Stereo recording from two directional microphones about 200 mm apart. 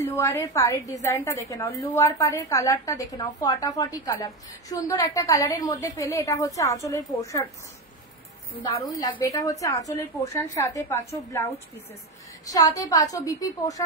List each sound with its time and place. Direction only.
0.1 s a woman's voice: 15° left (ahead or behind)
8.8 s a woman's voice: 20° left (ahead or behind)
12.4 s a woman's voice: 15° left (ahead or behind)